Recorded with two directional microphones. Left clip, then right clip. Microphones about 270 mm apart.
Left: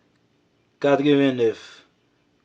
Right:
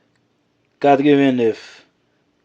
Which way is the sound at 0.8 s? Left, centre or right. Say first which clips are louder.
Right 5 dB; right.